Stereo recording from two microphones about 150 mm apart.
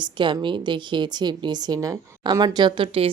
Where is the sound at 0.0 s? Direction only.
30° right (ahead or behind).